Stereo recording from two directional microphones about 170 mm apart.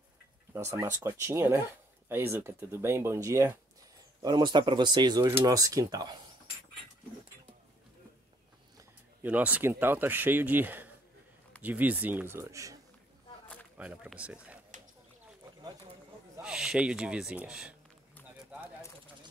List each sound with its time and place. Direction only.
0.5 s speech: 15° right (ahead or behind)
9.2 s speech: 10° right (ahead or behind)
13.7 s speech: 5° right (ahead or behind)
16.3 s speech: 5° right (ahead or behind)